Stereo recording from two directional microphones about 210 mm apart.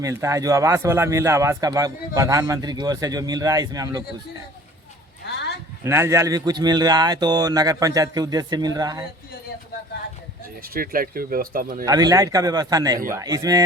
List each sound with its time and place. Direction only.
0.0 s a man's voice: 15° right (ahead or behind)
5.2 s a sound: 55° left (ahead or behind)
5.8 s speech: 10° right (ahead or behind)
10.6 s speech: 45° right (ahead or behind)
11.9 s a man's voice: 15° right (ahead or behind)